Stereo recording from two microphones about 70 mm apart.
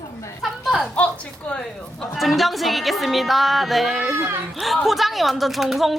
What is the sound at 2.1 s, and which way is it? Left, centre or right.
Music, centre.